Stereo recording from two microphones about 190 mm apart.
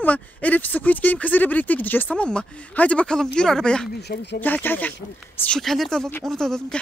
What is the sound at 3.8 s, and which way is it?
Speech, 55° left (ahead or behind).